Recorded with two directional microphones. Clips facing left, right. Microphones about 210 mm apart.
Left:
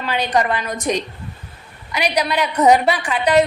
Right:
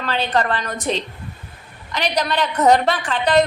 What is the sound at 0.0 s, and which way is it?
A woman's voice, 15° left (ahead or behind).